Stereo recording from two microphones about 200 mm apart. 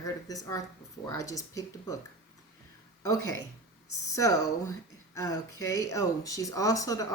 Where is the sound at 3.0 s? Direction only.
15° left (ahead or behind).